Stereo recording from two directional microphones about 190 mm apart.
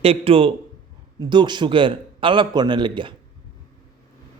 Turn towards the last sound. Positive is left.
turn(degrees=-25)  # may be behind; listen again after turning